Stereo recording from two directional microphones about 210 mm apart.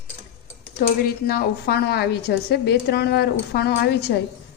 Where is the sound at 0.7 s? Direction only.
45° left (ahead or behind).